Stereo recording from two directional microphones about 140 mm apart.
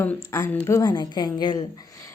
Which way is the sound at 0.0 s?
20° left (ahead or behind).